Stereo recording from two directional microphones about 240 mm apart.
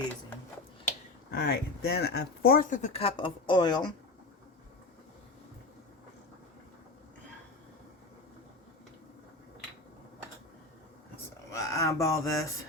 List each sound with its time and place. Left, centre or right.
1.3 s speech: left; by 3.8 s centre
11.5 s speech: centre